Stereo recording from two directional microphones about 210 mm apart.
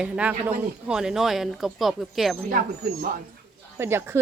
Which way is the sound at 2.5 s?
50° right (ahead or behind).